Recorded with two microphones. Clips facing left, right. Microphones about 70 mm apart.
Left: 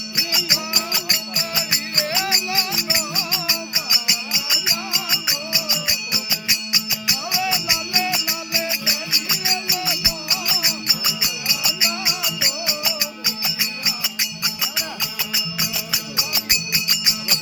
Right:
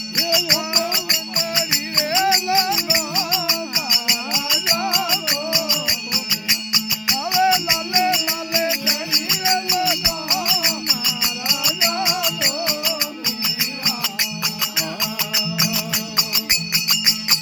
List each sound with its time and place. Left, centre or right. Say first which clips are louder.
0.5 s music: right 4 dB; right
4.7 s music: right 6 dB; right
11.8 s music: right 4 dB; right
13.2 s music: right 1 dB; centre
15.4 s music: right 5 dB; right